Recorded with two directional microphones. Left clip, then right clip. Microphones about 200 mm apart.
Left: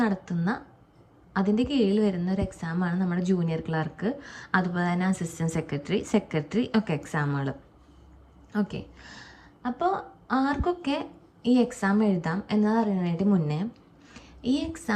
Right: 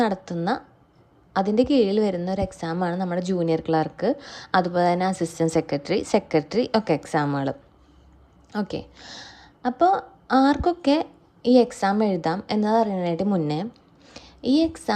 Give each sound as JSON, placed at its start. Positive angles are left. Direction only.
{"t": 0.0, "sound": "a woman's voice", "side_deg": -35}
{"t": 8.5, "sound": "a woman's voice", "side_deg": -35}
{"t": 14.1, "sound": "a sound", "side_deg": -30}